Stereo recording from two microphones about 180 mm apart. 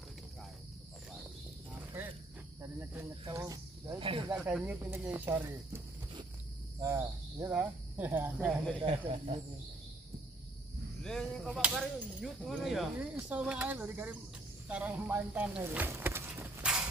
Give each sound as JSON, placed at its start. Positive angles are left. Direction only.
{"t": 2.0, "sound": "cricket", "side_deg": -10}
{"t": 4.3, "sound": "speech", "side_deg": -5}
{"t": 6.8, "sound": "speech", "side_deg": -15}
{"t": 8.8, "sound": "speech", "side_deg": -35}
{"t": 11.0, "sound": "speech", "side_deg": 5}